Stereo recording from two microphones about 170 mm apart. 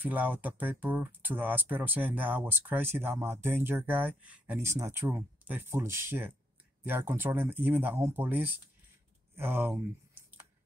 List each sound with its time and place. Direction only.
0.0 s speech: 10° right (ahead or behind)